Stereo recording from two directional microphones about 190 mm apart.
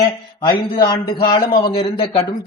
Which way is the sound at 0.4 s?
25° left (ahead or behind).